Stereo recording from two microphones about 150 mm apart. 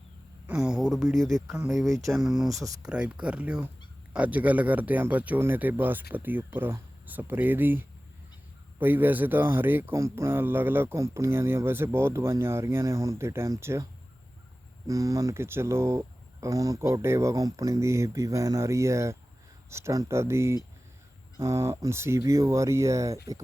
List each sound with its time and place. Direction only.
0.4 s speech: 5° right (ahead or behind)
1.7 s speech: centre (ahead or behind); by 13.8 s 20° right (ahead or behind)
14.8 s speech: 20° right (ahead or behind)